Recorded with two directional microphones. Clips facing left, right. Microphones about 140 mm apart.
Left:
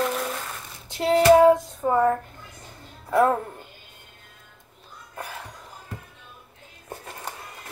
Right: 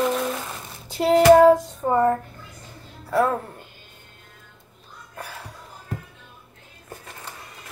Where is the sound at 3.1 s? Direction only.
15° left (ahead or behind).